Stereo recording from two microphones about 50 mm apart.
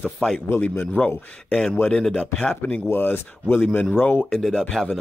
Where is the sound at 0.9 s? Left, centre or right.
Centre.